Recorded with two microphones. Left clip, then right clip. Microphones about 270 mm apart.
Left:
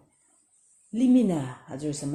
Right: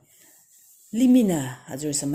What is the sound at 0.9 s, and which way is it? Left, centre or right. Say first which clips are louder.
Speech: right 3 dB; right.